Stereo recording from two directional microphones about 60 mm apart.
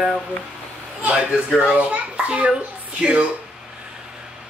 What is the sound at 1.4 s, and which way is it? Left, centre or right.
A child's voice, centre.